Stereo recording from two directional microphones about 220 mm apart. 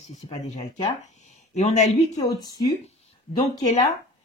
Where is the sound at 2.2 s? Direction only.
15° left (ahead or behind).